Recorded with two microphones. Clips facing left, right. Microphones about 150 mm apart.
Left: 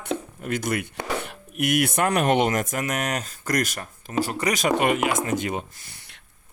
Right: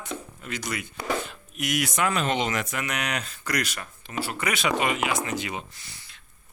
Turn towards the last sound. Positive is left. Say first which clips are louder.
# even
turn(degrees=50)  # may be behind; listen again after turning